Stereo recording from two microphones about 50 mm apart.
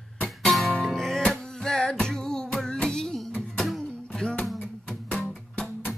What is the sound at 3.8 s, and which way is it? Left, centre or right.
Music, centre.